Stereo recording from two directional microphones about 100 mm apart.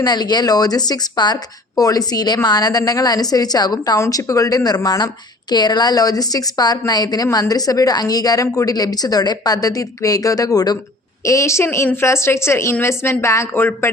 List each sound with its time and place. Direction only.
0.0 s a woman's voice: 45° left (ahead or behind); by 13.9 s 25° left (ahead or behind)